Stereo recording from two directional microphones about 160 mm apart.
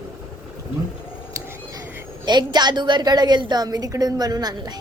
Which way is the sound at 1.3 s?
20° right (ahead or behind).